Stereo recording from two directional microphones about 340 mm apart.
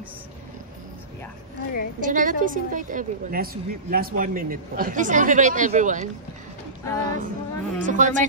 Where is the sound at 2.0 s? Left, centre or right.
Right.